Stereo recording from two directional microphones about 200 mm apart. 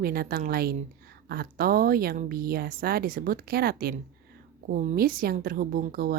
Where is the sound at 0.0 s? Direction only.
50° right (ahead or behind).